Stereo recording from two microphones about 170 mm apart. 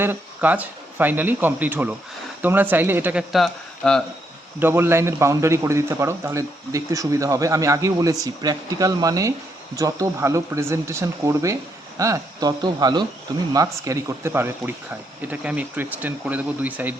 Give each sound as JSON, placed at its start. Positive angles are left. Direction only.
{"t": 0.0, "sound": "speech", "side_deg": -10}
{"t": 4.6, "sound": "a man's voice", "side_deg": -15}